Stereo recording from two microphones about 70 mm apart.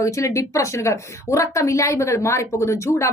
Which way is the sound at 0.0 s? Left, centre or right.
Left.